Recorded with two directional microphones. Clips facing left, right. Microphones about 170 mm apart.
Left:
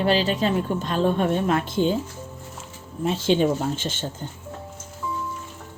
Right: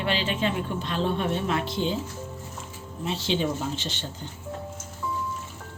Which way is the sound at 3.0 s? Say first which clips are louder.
Left 6 dB; 50° left (ahead or behind).